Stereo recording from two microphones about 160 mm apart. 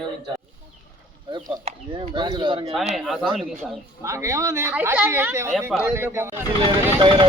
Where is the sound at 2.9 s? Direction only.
Centre (ahead or behind).